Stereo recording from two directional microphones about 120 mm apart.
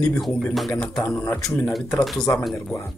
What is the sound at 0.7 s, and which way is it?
Speech, 10° left (ahead or behind).